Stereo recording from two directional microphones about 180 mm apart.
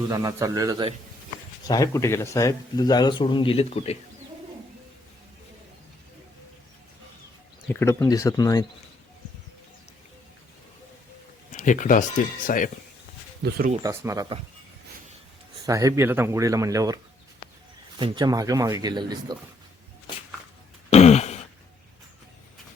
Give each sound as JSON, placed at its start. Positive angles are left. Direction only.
{"t": 0.1, "sound": "speech", "side_deg": -20}
{"t": 1.6, "sound": "speech", "side_deg": 20}
{"t": 7.7, "sound": "speech", "side_deg": 15}
{"t": 11.5, "sound": "speech", "side_deg": 45}
{"t": 13.4, "sound": "speech", "side_deg": -60}
{"t": 13.8, "sound": "speech", "side_deg": -20}
{"t": 15.6, "sound": "speech", "side_deg": -20}
{"t": 18.0, "sound": "speech", "side_deg": -25}
{"t": 20.9, "sound": "throat clearing", "side_deg": 35}